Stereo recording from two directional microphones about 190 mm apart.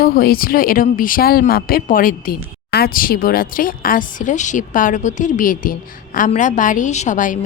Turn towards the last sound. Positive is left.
turn(degrees=40)  # may be behind; listen again after turning